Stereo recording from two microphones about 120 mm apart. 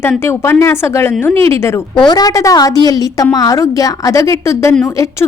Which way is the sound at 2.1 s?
35° left (ahead or behind).